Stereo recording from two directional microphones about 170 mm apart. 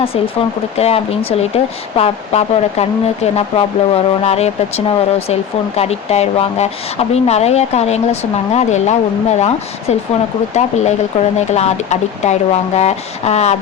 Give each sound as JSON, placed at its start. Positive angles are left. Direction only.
{"t": 0.8, "sound": "speech", "side_deg": 35}
{"t": 10.5, "sound": "speech", "side_deg": 40}